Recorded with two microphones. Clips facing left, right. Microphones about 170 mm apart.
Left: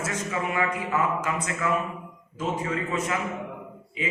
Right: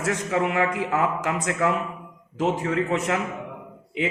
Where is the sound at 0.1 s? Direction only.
65° right (ahead or behind).